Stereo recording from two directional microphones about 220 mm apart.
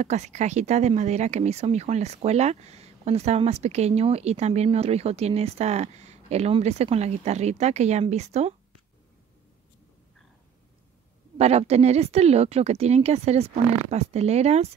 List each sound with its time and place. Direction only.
0.0 s speech: 30° right (ahead or behind)
11.3 s speech: 30° right (ahead or behind)